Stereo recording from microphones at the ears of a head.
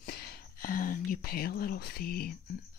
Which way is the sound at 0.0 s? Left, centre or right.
Left.